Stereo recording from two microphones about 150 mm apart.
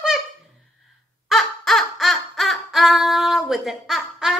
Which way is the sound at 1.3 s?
Centre (ahead or behind).